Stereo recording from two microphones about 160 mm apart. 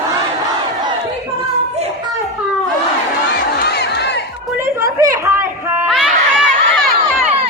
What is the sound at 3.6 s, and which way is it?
Crowd, 90° left.